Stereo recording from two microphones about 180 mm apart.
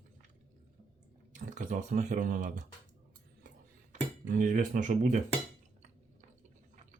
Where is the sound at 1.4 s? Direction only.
45° right (ahead or behind).